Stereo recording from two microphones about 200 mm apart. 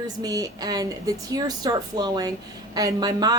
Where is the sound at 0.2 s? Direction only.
20° right (ahead or behind).